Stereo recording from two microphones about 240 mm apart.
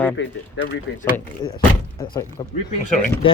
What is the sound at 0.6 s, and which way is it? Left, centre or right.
Speech, left.